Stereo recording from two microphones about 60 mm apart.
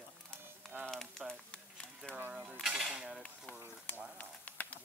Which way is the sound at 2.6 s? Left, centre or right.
Centre.